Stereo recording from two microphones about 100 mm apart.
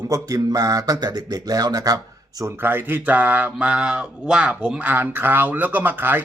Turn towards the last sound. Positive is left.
turn(degrees=-20)  # may be behind; listen again after turning